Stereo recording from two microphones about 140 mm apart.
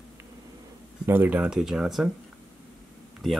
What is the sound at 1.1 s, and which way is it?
Speech, 10° right (ahead or behind).